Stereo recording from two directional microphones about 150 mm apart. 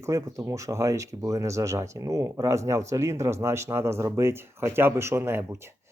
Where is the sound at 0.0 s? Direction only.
20° right (ahead or behind).